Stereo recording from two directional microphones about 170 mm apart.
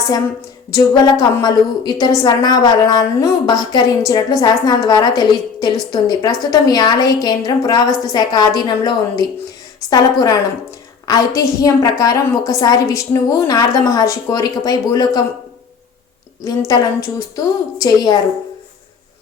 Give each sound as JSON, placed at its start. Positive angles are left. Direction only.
{"t": 0.7, "sound": "a woman's voice", "side_deg": 20}
{"t": 11.0, "sound": "a sound", "side_deg": 20}
{"t": 11.3, "sound": "a woman's voice", "side_deg": 20}
{"t": 16.4, "sound": "a woman's voice", "side_deg": 20}